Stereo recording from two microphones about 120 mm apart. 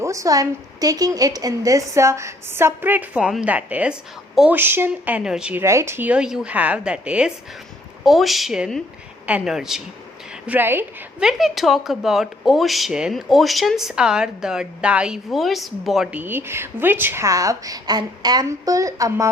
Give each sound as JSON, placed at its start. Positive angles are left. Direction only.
{"t": 0.0, "sound": "a woman's voice", "side_deg": -25}
{"t": 5.6, "sound": "a woman's voice", "side_deg": -20}
{"t": 10.4, "sound": "a woman's voice", "side_deg": -15}
{"t": 11.2, "sound": "speech", "side_deg": -5}
{"t": 16.1, "sound": "a woman's voice", "side_deg": -15}